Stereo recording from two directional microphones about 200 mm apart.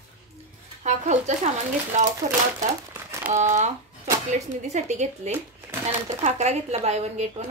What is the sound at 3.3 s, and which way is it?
A woman's voice, 35° right (ahead or behind).